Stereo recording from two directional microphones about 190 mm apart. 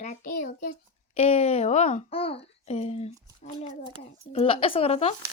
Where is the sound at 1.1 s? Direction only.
35° left (ahead or behind).